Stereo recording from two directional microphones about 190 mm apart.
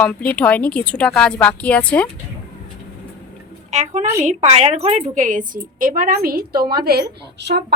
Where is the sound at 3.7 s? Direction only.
35° right (ahead or behind).